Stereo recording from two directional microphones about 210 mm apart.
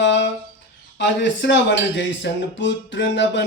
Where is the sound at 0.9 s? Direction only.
60° left (ahead or behind).